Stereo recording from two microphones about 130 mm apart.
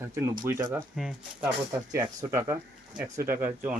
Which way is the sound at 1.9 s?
25° right (ahead or behind).